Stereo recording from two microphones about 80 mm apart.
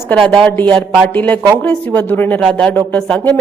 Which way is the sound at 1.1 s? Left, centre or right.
Centre.